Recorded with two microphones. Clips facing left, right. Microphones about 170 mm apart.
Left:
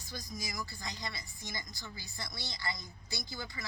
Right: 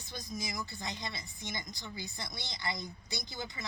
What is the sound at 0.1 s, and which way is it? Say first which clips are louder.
A woman's voice: right 2 dB; 25° right (ahead or behind).